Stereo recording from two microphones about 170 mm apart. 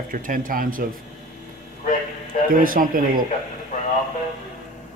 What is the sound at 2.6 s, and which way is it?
Speech, 55° right (ahead or behind).